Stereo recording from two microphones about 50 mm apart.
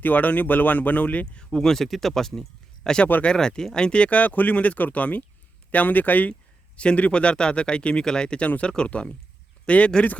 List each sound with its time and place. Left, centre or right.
0.0 s speech: left
1.5 s speech: centre; by 10.2 s left